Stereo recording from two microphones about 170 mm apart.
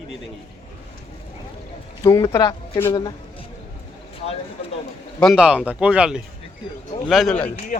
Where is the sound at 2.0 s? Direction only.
20° left (ahead or behind).